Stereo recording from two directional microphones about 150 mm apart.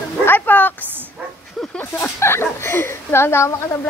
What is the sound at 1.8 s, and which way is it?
Speech, 15° left (ahead or behind).